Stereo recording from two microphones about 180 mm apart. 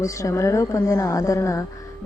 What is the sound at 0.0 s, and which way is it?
A woman's voice, 15° left (ahead or behind).